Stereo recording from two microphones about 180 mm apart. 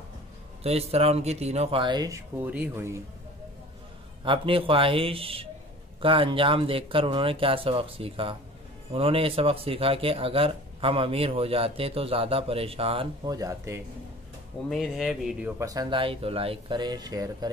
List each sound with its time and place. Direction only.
0.7 s speech: 35° right (ahead or behind); by 3.0 s 15° right (ahead or behind)
4.2 s speech: 30° right (ahead or behind)
14.7 s speech: centre (ahead or behind)
15.6 s speech: 20° right (ahead or behind)